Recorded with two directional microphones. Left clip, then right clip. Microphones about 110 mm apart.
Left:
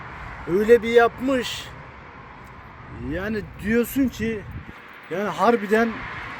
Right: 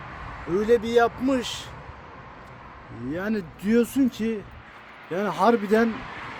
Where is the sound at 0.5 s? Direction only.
5° left (ahead or behind).